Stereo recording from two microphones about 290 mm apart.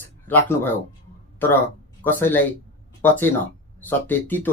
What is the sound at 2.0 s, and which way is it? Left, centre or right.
Speech, centre.